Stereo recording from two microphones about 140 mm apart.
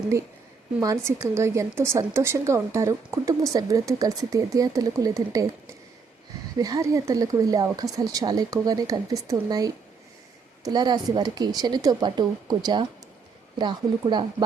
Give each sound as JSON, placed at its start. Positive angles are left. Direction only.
{"t": 0.8, "sound": "a woman's voice", "side_deg": -20}